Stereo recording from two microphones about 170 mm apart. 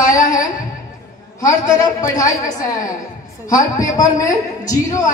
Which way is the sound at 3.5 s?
20° left (ahead or behind).